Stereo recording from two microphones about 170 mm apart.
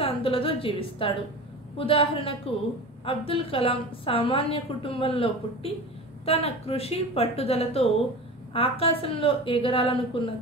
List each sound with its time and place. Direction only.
0.0 s a woman's voice: 35° left (ahead or behind)